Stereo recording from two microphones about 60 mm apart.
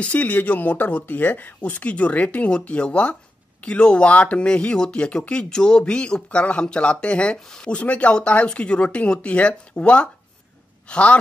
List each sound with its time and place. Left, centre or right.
0.0 s speech: left